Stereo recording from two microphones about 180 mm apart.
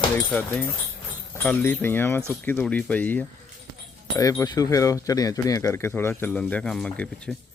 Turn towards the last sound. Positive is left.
turn(degrees=5)  # may be behind; listen again after turning